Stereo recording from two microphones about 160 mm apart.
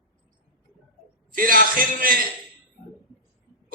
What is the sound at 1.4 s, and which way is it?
Speech, 60° right (ahead or behind).